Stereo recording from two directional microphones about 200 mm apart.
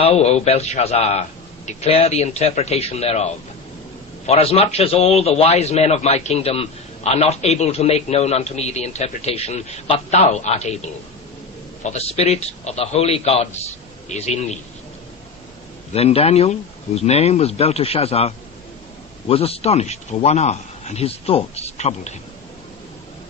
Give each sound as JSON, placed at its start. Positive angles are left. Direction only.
{"t": 0.0, "sound": "a man's voice", "side_deg": 30}
{"t": 4.3, "sound": "a man's voice", "side_deg": 30}
{"t": 15.9, "sound": "a man's voice", "side_deg": 30}